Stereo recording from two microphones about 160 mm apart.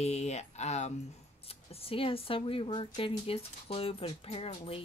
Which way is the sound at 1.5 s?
35° left (ahead or behind).